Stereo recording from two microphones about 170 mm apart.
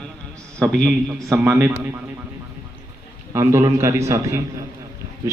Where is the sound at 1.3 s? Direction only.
10° right (ahead or behind).